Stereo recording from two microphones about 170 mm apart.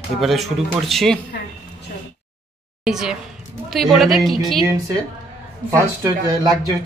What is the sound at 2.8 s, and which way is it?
Speech, 5° right (ahead or behind).